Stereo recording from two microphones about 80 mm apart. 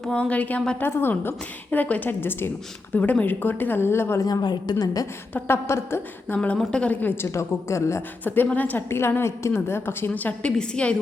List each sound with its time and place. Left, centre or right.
0.0 s a woman's voice: centre; by 4.2 s left
4.2 s a woman's voice: left
5.3 s a woman's voice: left
6.3 s a woman's voice: centre; by 8.0 s left
8.5 s a woman's voice: left
10.6 s speech: centre